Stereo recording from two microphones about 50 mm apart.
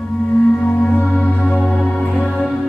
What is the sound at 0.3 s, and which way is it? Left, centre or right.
Music, left.